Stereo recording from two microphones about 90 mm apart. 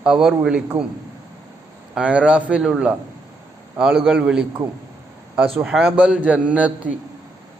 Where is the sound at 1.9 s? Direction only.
15° right (ahead or behind).